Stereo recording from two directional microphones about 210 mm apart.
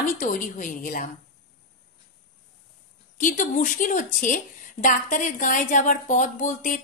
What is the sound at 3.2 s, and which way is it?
A woman's voice, 40° left (ahead or behind).